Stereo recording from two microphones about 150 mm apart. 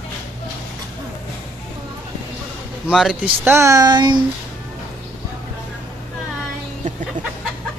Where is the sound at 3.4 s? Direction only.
15° right (ahead or behind).